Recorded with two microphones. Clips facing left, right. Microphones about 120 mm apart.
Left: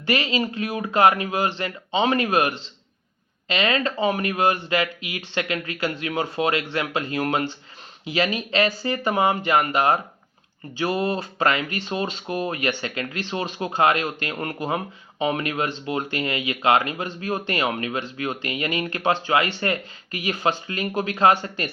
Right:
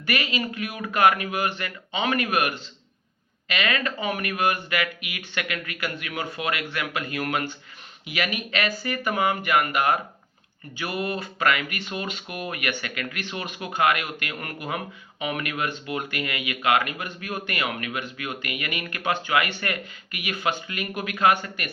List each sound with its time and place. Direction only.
0.0 s speech: 30° left (ahead or behind)